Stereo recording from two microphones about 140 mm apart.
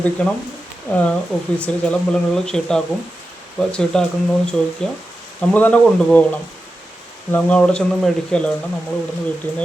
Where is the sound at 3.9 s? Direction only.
5° left (ahead or behind).